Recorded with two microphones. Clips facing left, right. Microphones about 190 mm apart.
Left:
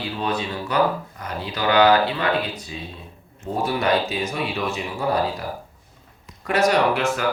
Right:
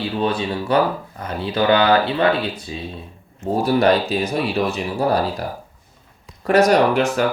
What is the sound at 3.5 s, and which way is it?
Speech, 40° right (ahead or behind).